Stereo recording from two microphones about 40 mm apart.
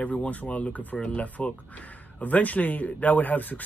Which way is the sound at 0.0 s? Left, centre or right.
Left.